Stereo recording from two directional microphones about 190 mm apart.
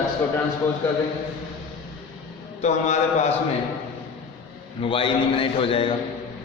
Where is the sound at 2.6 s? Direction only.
40° left (ahead or behind).